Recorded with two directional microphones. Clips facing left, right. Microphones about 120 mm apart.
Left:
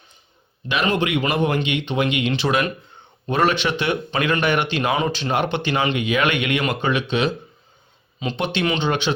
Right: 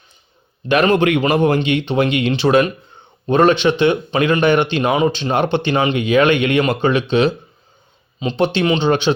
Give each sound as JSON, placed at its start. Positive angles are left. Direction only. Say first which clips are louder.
{"t": 0.7, "sound": "a man's voice", "louder": "right 7 dB", "side_deg": -45}
{"t": 1.2, "sound": "speech", "louder": "right 6 dB", "side_deg": -40}